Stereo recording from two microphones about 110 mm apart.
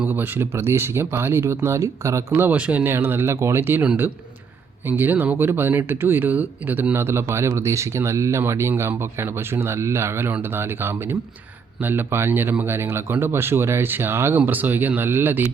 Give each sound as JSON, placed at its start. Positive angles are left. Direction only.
{"t": 0.0, "sound": "speech", "side_deg": -15}
{"t": 4.9, "sound": "speech", "side_deg": -20}